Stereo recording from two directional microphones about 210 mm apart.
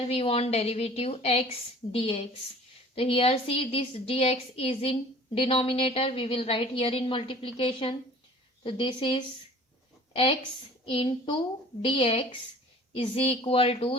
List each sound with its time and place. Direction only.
0.0 s a woman's voice: 30° left (ahead or behind)
10.1 s a sound: 25° left (ahead or behind)
10.8 s a woman's voice: 25° left (ahead or behind)